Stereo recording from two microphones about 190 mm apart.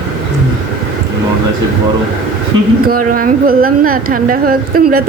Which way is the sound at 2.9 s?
50° right (ahead or behind).